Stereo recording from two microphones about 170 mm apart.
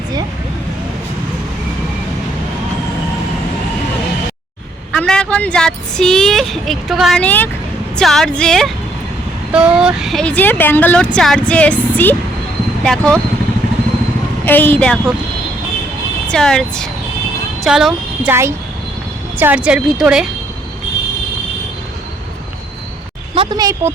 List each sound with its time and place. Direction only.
4.9 s speech: 5° left (ahead or behind)
14.4 s speech: 10° left (ahead or behind)
16.3 s speech: 5° left (ahead or behind)
18.3 s speech: 15° right (ahead or behind)
23.3 s a woman's voice: 30° right (ahead or behind)